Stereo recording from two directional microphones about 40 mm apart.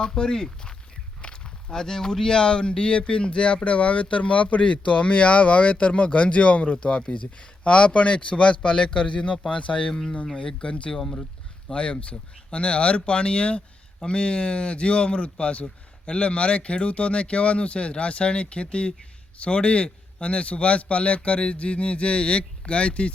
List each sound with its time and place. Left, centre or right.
0.0 s speech: left